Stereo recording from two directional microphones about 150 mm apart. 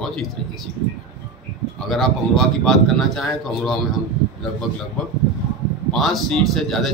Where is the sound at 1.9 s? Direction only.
Centre (ahead or behind).